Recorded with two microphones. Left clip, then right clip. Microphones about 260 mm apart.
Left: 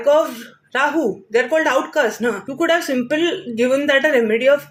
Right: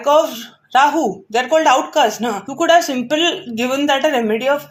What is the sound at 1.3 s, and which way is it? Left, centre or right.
Speech, right.